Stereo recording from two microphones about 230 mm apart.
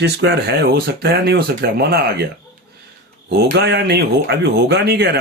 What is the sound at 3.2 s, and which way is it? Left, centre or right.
Speech, right.